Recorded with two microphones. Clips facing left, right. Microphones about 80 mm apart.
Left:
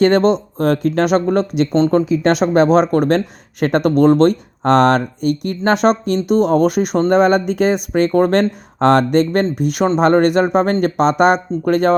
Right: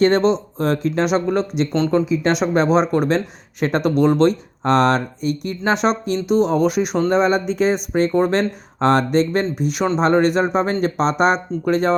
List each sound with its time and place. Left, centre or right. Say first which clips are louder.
0.6 s speech: left 4 dB; left
4.6 s speech: left 4 dB; left
7.1 s speech: left 6 dB; left
8.2 s speech: left 4 dB; left